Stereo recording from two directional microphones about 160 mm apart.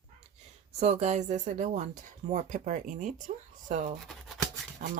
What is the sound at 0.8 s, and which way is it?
Speech, 45° right (ahead or behind).